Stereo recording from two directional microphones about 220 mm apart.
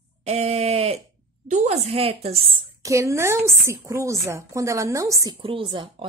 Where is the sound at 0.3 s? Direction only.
30° right (ahead or behind).